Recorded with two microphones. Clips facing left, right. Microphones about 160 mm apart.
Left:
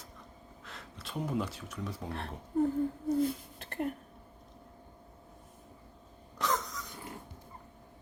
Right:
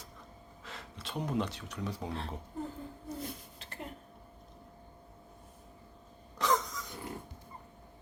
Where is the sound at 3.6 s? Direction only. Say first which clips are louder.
Left 12 dB; 55° left (ahead or behind).